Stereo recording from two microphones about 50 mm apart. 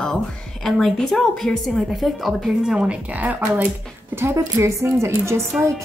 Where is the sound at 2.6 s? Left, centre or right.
Centre.